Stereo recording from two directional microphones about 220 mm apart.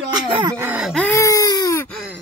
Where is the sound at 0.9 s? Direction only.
10° left (ahead or behind).